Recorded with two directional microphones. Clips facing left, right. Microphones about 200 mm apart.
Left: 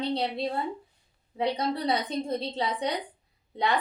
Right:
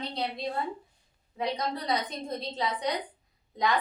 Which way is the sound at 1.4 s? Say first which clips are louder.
Left 4 dB; 30° left (ahead or behind).